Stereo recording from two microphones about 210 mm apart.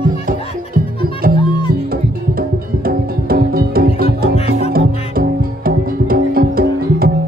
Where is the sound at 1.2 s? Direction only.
45° right (ahead or behind).